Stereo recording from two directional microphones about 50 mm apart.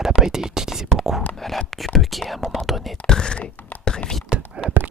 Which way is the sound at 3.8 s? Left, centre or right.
Centre.